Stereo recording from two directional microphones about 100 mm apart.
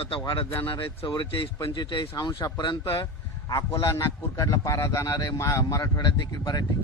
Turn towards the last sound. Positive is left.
turn(degrees=45)  # may be behind; listen again after turning